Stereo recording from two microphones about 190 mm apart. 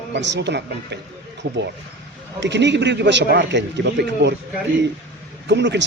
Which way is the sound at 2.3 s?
65° right (ahead or behind).